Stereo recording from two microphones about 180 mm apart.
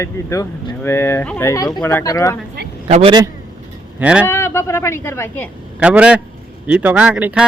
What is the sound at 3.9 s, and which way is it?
Speech, 5° right (ahead or behind).